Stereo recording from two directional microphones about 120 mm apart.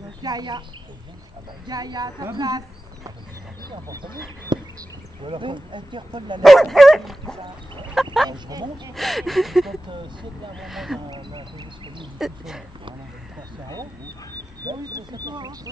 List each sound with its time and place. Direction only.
0.2 s speech: 35° right (ahead or behind)
1.7 s speech: 35° right (ahead or behind)
6.4 s dog: centre (ahead or behind)
7.9 s fowl: centre (ahead or behind)
8.3 s speech: 35° right (ahead or behind)
8.9 s dog: centre (ahead or behind)
11.1 s speech: 40° right (ahead or behind)
12.2 s dog: 5° right (ahead or behind)
14.6 s speech: 30° right (ahead or behind)